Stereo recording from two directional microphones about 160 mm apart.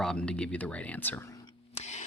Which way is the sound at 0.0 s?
5° left (ahead or behind).